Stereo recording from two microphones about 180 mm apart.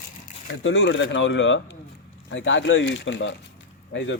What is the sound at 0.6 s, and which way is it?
Speech, 90° left.